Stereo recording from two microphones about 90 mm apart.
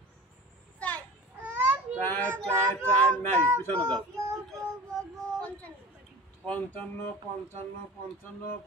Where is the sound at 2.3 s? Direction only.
30° right (ahead or behind).